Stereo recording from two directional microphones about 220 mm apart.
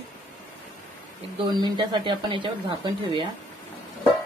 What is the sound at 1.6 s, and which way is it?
Speech, 20° right (ahead or behind).